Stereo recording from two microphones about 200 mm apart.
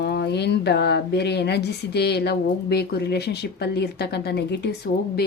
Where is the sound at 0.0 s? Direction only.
55° left (ahead or behind).